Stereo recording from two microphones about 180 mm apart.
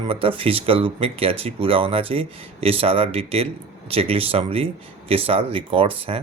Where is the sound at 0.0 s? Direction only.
30° right (ahead or behind).